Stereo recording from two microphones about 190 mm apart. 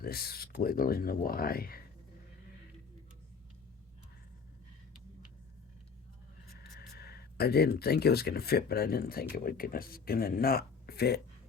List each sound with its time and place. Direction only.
0.0 s speech: 55° left (ahead or behind)
6.6 s speech: 60° left (ahead or behind)